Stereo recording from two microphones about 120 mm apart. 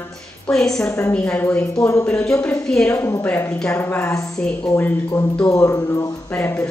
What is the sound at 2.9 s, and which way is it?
A woman's voice, 20° left (ahead or behind).